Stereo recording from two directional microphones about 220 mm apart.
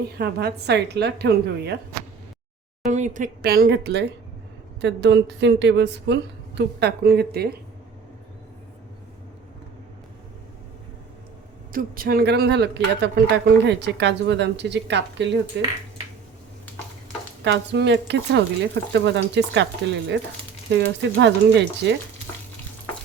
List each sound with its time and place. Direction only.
0.2 s speech: 50° right (ahead or behind)
2.9 s speech: 35° right (ahead or behind)
11.7 s speech: 40° right (ahead or behind)
17.4 s speech: 50° right (ahead or behind)